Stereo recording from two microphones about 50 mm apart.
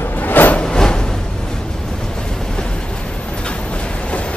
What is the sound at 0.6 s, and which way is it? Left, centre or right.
Music, centre.